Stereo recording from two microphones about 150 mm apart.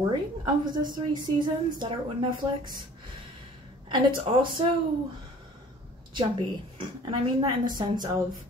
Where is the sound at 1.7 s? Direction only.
30° right (ahead or behind).